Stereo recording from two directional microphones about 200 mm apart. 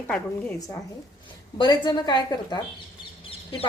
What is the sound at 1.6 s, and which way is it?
A woman's voice, 20° left (ahead or behind).